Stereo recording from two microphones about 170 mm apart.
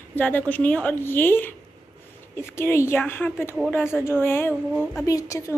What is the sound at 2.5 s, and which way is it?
A woman's voice, 15° left (ahead or behind).